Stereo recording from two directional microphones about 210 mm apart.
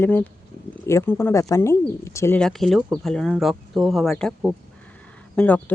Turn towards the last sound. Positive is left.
turn(degrees=5)  # may be behind; listen again after turning